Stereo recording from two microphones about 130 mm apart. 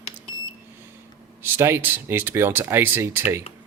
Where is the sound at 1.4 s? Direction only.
15° right (ahead or behind).